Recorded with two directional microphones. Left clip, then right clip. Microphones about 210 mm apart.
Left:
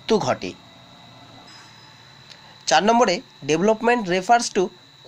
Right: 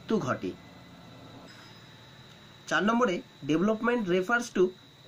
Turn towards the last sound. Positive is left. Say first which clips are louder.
# left 9 dB
turn(degrees=20)  # may be behind; listen again after turning